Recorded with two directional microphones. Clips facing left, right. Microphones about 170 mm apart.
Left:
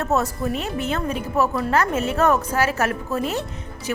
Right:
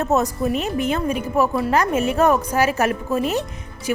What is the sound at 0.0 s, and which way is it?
Speech, 15° right (ahead or behind).